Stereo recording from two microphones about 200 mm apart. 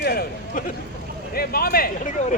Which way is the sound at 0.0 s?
50° left (ahead or behind).